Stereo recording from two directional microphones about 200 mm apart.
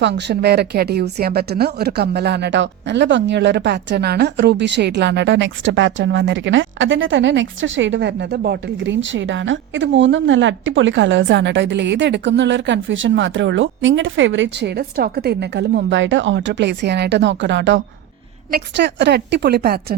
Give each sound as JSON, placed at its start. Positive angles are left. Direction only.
{"t": 0.0, "sound": "speech", "side_deg": -60}